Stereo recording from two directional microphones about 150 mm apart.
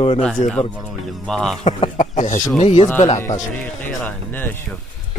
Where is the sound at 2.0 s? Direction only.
55° left (ahead or behind).